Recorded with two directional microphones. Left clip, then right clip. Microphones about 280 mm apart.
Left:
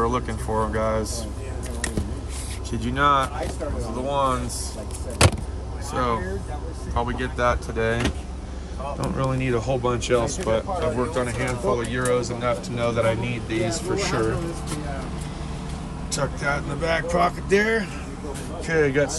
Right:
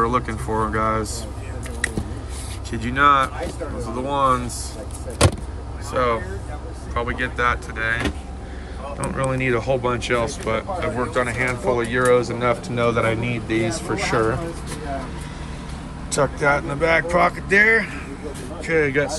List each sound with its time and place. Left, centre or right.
0.0 s speech: centre
2.7 s speech: centre
5.9 s speech: centre
9.1 s speech: centre
16.1 s speech: centre